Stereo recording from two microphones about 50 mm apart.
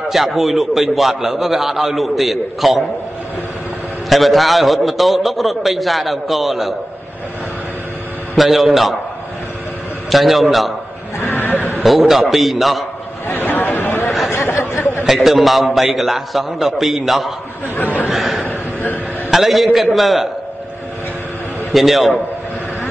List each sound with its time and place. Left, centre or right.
0.1 s a man's voice: centre
4.1 s a man's voice: centre
8.4 s a man's voice: centre
10.0 s a man's voice: centre
11.1 s a sound: left
11.8 s a man's voice: centre
13.3 s chatter: left
14.0 s chatter: centre
14.3 s a sound: left
15.0 s a man's voice: centre
18.1 s a sound: centre
19.3 s a man's voice: centre
21.7 s a man's voice: centre